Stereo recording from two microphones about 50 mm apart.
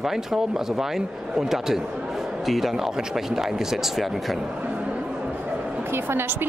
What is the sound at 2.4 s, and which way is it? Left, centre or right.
Speech, centre.